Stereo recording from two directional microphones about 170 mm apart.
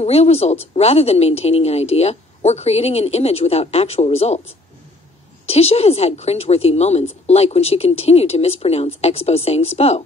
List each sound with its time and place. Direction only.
0.0 s a woman's voice: 40° left (ahead or behind)
5.5 s a woman's voice: 35° left (ahead or behind)